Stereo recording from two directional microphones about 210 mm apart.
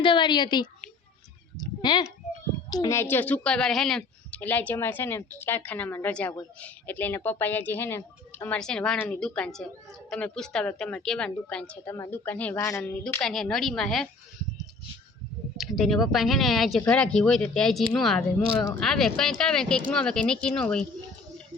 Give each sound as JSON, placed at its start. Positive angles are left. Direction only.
{"t": 0.0, "sound": "a woman's voice", "side_deg": 20}
{"t": 1.5, "sound": "a sound", "side_deg": 20}
{"t": 2.6, "sound": "speech", "side_deg": 20}
{"t": 15.5, "sound": "speech", "side_deg": 0}